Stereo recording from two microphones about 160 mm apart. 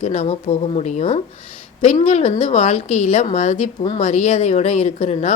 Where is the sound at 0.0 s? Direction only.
45° left (ahead or behind).